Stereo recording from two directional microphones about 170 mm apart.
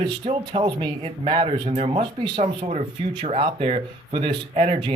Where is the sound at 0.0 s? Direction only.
30° right (ahead or behind).